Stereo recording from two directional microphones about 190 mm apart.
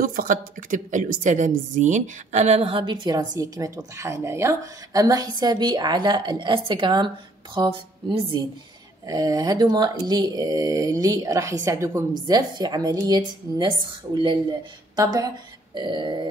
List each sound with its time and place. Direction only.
0.0 s a woman's voice: 50° right (ahead or behind); by 16.3 s 25° right (ahead or behind)